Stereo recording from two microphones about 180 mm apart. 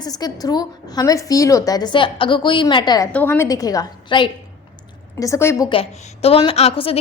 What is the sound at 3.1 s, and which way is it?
A woman's voice, 10° left (ahead or behind).